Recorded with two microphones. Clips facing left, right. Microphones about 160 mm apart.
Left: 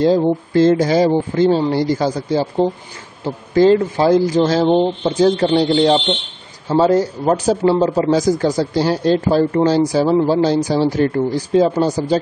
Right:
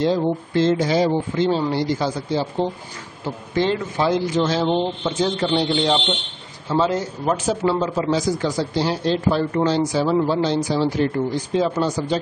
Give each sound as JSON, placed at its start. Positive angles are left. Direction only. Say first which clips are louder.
{"t": 0.0, "sound": "speech", "louder": "left 5 dB", "side_deg": 40}